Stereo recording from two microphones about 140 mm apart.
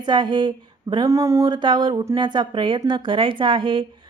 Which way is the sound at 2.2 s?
35° right (ahead or behind).